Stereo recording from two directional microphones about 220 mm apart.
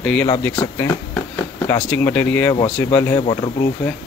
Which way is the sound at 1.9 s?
10° left (ahead or behind).